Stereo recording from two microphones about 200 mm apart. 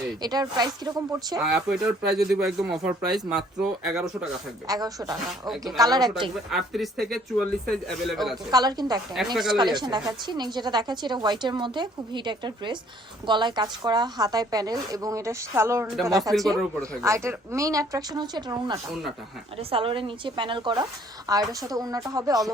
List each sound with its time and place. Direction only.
0.2 s speech: 20° right (ahead or behind)
1.4 s speech: 5° right (ahead or behind)
4.7 s speech: 20° right (ahead or behind)
6.3 s speech: centre (ahead or behind)
8.4 s speech: 20° right (ahead or behind)
9.1 s speech: centre (ahead or behind)
9.6 s speech: 20° right (ahead or behind)